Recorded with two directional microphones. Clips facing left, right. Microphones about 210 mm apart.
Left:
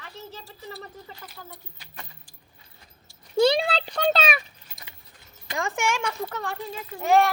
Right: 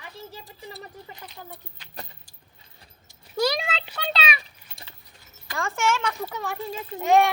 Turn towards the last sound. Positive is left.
turn(degrees=-20)  # may be behind; listen again after turning